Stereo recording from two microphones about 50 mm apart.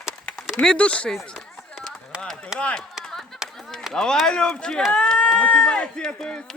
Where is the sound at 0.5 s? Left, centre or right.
Centre.